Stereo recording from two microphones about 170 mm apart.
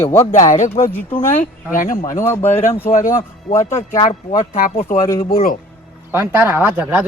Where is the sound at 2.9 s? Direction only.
55° left (ahead or behind).